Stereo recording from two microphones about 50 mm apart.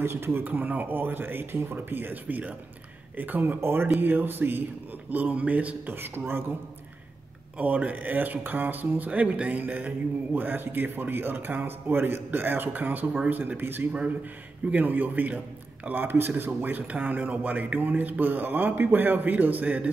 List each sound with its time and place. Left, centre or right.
0.0 s speech: right
0.4 s a man's voice: right
5.1 s a man's voice: right
5.9 s speech: right
7.5 s a man's voice: right